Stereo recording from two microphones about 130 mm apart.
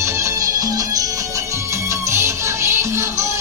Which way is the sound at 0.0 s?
25° right (ahead or behind).